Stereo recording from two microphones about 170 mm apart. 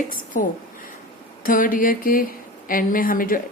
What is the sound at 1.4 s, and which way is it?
A woman's voice, 55° left (ahead or behind).